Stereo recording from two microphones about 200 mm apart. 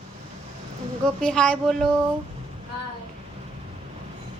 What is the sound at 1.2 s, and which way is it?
Speech, 5° left (ahead or behind).